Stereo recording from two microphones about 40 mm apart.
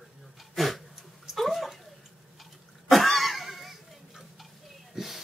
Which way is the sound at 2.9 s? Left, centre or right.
Centre.